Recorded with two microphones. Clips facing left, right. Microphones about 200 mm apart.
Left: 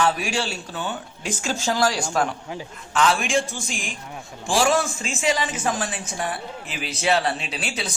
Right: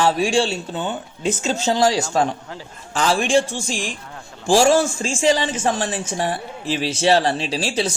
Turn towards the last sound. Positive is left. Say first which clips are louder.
# right 8 dB
turn(degrees=-30)  # may be behind; listen again after turning